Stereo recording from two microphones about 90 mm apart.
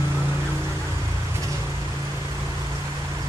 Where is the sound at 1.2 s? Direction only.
35° right (ahead or behind).